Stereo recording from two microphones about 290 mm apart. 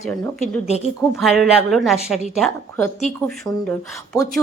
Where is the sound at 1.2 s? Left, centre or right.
Centre.